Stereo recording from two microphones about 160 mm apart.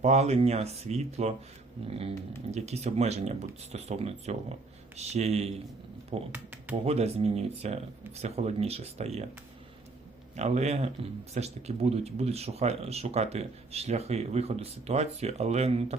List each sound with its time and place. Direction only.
0.0 s speech: 45° right (ahead or behind)
6.3 s speech: 10° right (ahead or behind)
6.8 s speech: 40° right (ahead or behind)
10.3 s speech: 45° right (ahead or behind)